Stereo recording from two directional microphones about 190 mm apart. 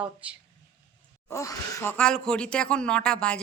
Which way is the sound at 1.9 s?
5° left (ahead or behind).